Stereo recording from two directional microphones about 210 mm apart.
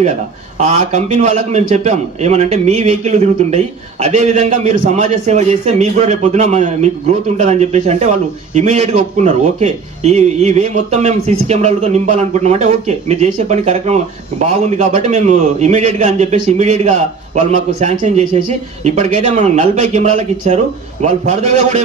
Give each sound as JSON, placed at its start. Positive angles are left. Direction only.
{"t": 0.6, "sound": "a man's voice", "side_deg": -35}